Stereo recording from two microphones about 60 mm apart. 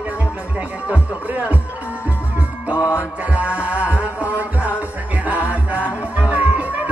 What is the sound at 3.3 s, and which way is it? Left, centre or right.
Music, right.